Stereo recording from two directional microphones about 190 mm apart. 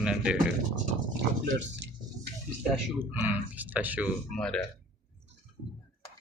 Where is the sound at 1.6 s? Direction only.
65° right (ahead or behind).